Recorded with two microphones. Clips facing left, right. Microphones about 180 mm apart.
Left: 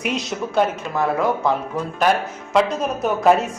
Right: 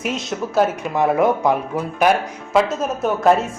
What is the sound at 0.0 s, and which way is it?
Speech, centre (ahead or behind).